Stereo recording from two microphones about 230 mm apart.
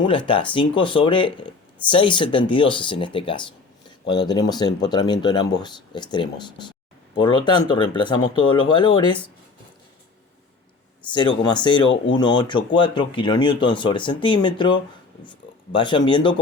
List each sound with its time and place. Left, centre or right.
0.3 s speech: left
11.0 s speech: centre
11.9 s speech: left
12.2 s speech: centre